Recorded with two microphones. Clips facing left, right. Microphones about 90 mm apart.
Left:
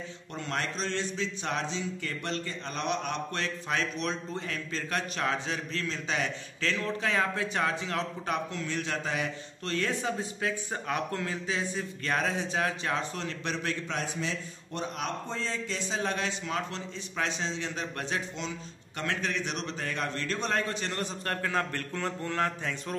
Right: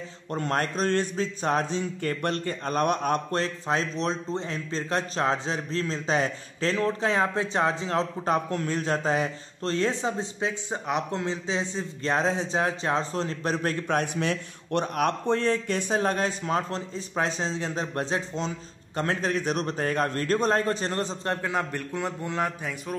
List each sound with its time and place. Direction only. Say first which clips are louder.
0.3 s a man's voice: right 7 dB; 45° right (ahead or behind)
8.5 s a man's voice: right 6 dB; 45° right (ahead or behind); by 22.9 s 10° right (ahead or behind)